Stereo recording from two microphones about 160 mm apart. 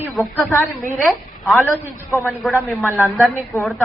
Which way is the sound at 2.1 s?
15° left (ahead or behind).